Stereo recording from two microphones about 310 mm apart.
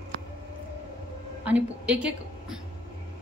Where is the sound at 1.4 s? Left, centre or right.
Centre.